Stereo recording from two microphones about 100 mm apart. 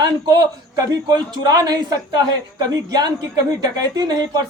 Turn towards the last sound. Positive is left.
turn(degrees=-40)  # may be behind; listen again after turning